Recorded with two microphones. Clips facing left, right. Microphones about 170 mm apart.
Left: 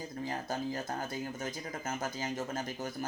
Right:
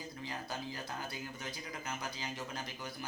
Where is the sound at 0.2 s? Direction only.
45° left (ahead or behind).